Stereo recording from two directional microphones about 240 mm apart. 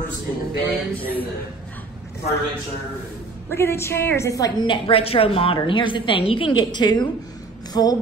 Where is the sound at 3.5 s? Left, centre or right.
Centre.